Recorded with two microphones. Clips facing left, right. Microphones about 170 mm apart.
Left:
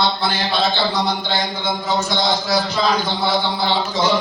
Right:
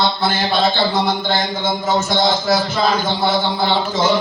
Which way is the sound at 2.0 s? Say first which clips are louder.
Right 4 dB; 50° right (ahead or behind).